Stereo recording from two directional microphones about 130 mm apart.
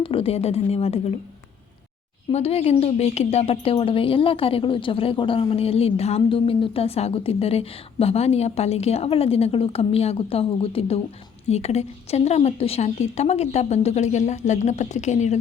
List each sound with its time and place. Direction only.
0.0 s speech: 45° left (ahead or behind)
2.3 s a woman's voice: 50° left (ahead or behind)